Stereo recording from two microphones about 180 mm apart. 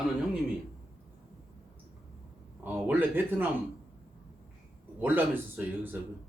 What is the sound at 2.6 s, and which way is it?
Speech, 10° right (ahead or behind).